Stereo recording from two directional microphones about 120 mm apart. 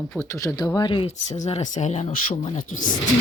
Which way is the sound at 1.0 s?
80° left.